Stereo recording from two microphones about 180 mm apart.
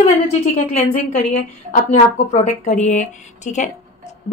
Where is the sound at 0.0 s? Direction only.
40° left (ahead or behind).